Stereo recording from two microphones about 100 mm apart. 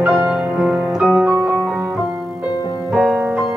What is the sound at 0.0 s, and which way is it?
Music, 10° right (ahead or behind).